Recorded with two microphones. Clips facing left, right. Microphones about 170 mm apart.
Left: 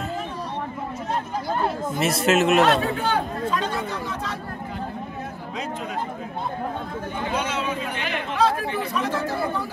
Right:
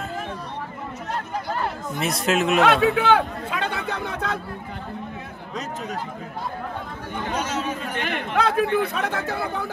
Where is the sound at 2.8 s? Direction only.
70° right (ahead or behind).